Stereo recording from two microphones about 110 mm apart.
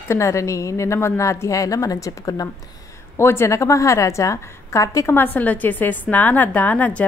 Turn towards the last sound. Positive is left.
turn(degrees=15)  # may be behind; listen again after turning